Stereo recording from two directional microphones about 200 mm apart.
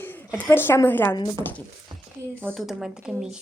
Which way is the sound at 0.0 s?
10° left (ahead or behind).